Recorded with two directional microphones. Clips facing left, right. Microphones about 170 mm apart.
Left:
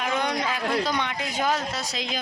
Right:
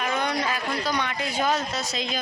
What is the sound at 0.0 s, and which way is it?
Speech, 15° left (ahead or behind).